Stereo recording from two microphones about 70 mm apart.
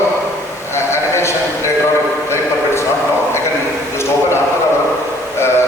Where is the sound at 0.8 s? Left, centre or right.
Left.